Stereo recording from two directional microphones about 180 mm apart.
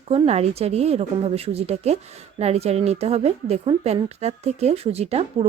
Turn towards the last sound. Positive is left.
turn(degrees=-35)  # may be behind; listen again after turning